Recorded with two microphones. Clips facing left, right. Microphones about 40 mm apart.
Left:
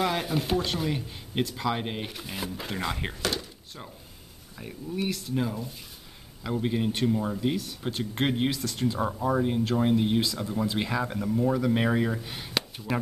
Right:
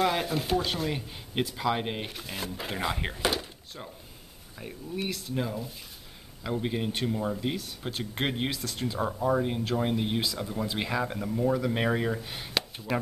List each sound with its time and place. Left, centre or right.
0.0 s speech: centre
3.2 s speech: centre
4.6 s speech: centre